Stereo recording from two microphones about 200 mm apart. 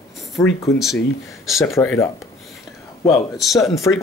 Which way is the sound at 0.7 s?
Centre (ahead or behind).